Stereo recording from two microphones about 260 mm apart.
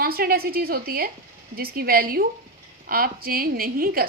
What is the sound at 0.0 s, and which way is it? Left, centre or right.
A woman's voice, right.